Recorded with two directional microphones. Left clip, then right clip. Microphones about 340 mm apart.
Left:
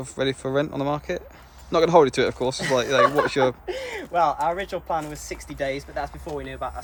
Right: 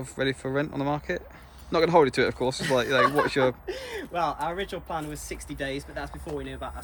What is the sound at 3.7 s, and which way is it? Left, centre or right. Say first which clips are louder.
Speech: left 4 dB; centre.